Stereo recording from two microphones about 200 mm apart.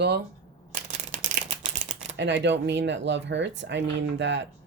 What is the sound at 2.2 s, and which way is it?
Speech, 60° right (ahead or behind).